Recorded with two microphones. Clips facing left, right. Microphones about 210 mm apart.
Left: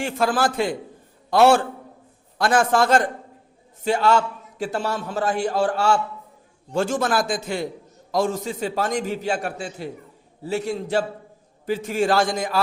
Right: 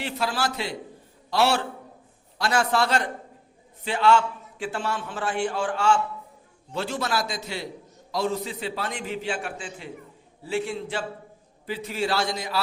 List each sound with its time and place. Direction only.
0.0 s a man's voice: 50° left (ahead or behind)